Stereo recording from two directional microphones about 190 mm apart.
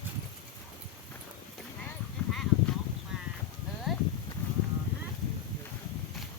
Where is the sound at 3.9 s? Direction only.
Centre (ahead or behind).